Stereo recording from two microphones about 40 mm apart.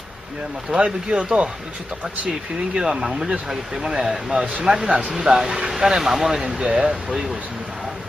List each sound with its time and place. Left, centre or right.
1.1 s speech: right
2.7 s speech: centre
6.6 s speech: right